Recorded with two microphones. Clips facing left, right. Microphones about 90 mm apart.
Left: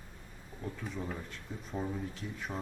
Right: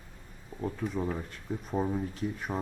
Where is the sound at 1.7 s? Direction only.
30° right (ahead or behind).